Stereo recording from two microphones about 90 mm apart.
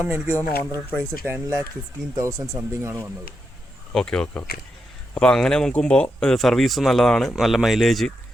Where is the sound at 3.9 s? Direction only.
10° left (ahead or behind).